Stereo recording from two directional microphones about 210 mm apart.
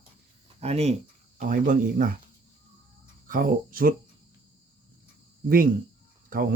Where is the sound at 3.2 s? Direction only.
40° right (ahead or behind).